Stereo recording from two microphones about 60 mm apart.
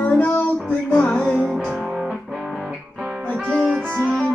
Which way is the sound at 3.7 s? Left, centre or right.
Centre.